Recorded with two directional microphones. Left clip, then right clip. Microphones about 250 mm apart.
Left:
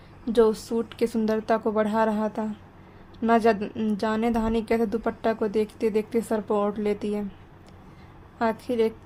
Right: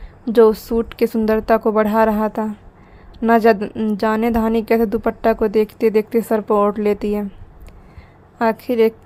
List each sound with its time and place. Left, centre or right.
0.3 s a woman's voice: right
8.4 s a woman's voice: right